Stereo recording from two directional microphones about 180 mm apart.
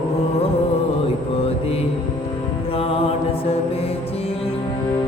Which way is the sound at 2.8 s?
30° left (ahead or behind).